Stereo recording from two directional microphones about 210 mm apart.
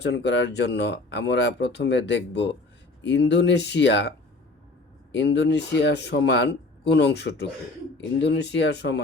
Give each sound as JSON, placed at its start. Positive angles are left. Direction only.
{"t": 0.0, "sound": "speech", "side_deg": 55}
{"t": 5.1, "sound": "speech", "side_deg": 55}